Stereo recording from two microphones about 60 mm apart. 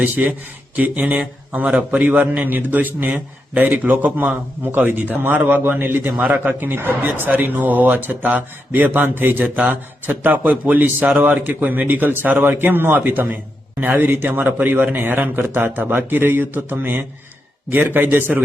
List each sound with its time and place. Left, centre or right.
0.0 s a man's voice: right